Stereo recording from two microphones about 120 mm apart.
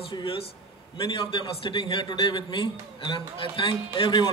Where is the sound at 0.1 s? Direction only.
45° left (ahead or behind).